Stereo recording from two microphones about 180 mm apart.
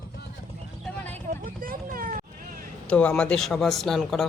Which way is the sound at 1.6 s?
50° right (ahead or behind).